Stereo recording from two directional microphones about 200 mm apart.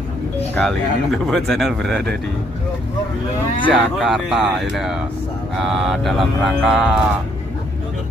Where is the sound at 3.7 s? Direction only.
Centre (ahead or behind).